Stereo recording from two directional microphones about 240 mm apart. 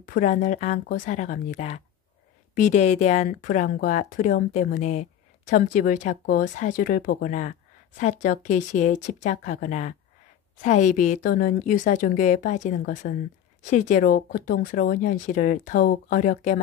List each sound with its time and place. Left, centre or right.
0.0 s speech: left